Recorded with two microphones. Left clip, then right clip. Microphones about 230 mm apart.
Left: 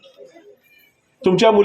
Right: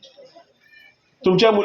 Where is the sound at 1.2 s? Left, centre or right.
Left.